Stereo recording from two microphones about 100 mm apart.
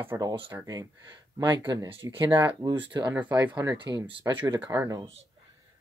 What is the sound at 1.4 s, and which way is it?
Speech, 50° right (ahead or behind).